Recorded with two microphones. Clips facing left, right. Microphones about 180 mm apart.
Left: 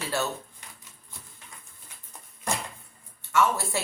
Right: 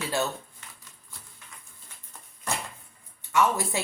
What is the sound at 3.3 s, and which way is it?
Speech, 15° right (ahead or behind).